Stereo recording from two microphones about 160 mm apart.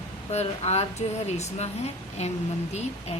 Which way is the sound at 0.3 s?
40° left (ahead or behind).